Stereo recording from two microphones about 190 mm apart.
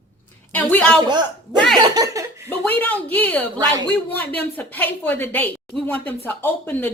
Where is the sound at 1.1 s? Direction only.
20° right (ahead or behind).